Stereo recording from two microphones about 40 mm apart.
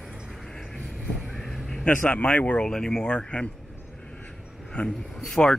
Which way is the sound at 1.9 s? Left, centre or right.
Left.